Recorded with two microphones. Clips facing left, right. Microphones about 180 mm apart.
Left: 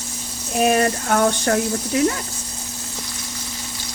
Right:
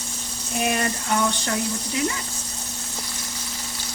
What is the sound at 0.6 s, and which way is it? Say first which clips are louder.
Speech: left 7 dB; 55° left (ahead or behind).